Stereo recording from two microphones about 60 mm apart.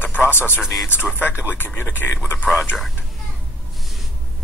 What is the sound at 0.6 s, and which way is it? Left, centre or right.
Speech, centre.